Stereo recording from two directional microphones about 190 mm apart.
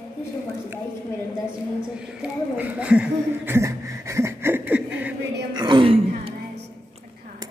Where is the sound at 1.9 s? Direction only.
5° right (ahead or behind).